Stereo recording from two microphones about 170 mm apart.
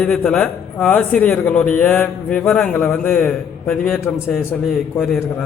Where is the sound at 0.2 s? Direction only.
5° left (ahead or behind).